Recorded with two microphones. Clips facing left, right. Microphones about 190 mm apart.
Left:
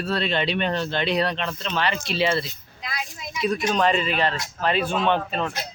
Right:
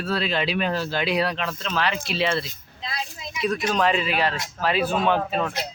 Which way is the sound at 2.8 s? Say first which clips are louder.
Right 1 dB; 30° right (ahead or behind).